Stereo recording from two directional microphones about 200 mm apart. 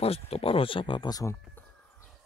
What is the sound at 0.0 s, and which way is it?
Speech, 30° left (ahead or behind).